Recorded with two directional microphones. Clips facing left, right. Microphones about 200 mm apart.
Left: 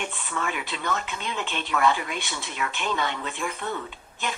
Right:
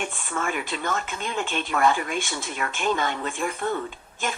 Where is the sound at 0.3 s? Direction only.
45° right (ahead or behind).